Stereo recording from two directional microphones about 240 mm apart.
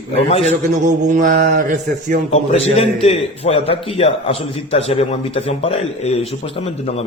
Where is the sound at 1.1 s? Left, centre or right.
Right.